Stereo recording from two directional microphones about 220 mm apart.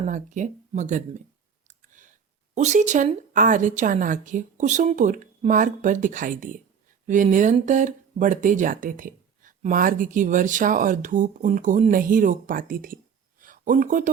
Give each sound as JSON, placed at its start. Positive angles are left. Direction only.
{"t": 0.0, "sound": "speech", "side_deg": -35}
{"t": 1.6, "sound": "clicking", "side_deg": -35}
{"t": 2.6, "sound": "speech", "side_deg": -35}